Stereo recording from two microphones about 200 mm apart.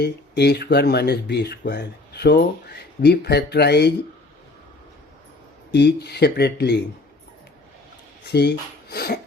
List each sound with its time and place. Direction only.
0.0 s speech: 55° left (ahead or behind)
5.7 s speech: 55° left (ahead or behind)
8.3 s speech: 55° left (ahead or behind)